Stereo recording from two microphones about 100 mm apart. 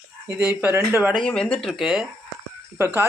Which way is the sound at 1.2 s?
10° left (ahead or behind).